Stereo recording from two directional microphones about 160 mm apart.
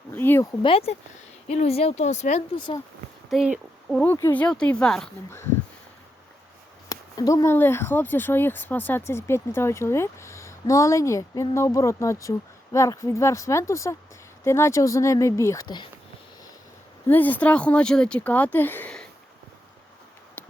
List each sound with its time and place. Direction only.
0.1 s speech: 15° left (ahead or behind)
0.6 s speech: 35° left (ahead or behind)
2.6 s speech: 30° left (ahead or behind)
3.2 s speech: centre (ahead or behind)
4.0 s speech: 10° left (ahead or behind)
6.8 s speech: 20° left (ahead or behind)
17.1 s speech: 10° left (ahead or behind)